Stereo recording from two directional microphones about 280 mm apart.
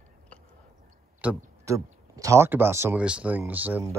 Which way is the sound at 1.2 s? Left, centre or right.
Centre.